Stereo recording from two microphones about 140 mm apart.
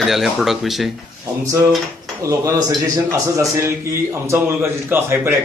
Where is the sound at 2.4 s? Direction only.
25° right (ahead or behind).